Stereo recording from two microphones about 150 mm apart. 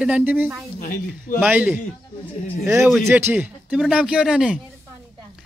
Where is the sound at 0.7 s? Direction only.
70° left (ahead or behind).